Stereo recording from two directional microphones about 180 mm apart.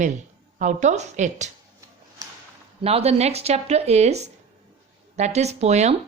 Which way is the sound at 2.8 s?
35° right (ahead or behind).